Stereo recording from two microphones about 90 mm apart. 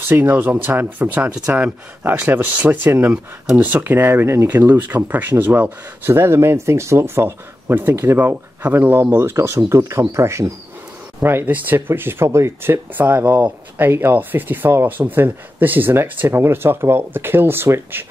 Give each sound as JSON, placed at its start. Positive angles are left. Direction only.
{"t": 0.1, "sound": "speech", "side_deg": -20}